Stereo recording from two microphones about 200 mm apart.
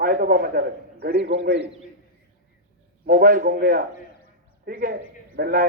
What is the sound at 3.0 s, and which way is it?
A man's voice, 45° right (ahead or behind).